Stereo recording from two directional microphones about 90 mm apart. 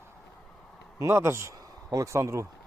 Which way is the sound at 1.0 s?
30° right (ahead or behind).